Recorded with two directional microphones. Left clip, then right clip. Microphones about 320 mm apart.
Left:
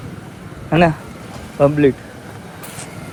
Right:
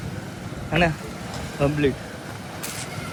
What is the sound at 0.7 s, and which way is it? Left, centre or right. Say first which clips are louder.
Speech: left 7 dB; left.